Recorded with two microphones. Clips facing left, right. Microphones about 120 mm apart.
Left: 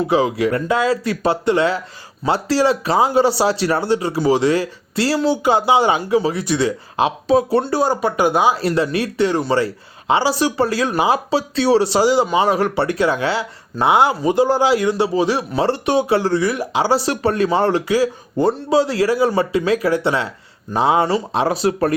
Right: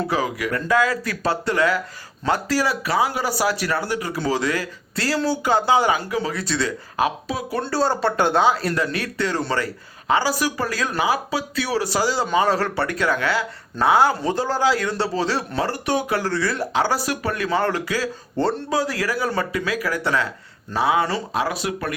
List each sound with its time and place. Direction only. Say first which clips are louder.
0.1 s speech: left 7 dB; 20° left (ahead or behind)
8.6 s speech: left 5 dB; 25° left (ahead or behind)